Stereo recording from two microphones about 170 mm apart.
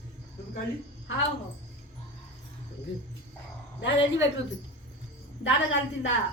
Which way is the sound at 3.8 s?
90° left.